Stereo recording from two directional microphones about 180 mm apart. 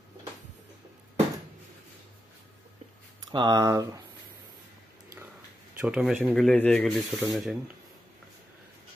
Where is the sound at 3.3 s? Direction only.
25° right (ahead or behind).